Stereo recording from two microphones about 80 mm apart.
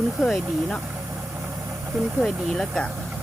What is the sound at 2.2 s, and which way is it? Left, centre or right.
Speech, centre.